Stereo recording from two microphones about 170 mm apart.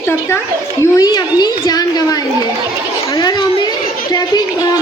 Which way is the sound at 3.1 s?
25° left (ahead or behind).